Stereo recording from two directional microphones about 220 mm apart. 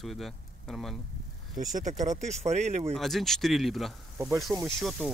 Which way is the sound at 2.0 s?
30° right (ahead or behind).